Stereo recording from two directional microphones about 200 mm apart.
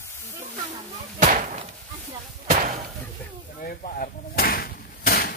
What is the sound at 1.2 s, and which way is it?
Slam, 40° right (ahead or behind).